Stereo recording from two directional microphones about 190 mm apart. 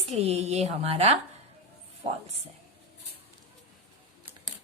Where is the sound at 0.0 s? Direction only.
35° right (ahead or behind).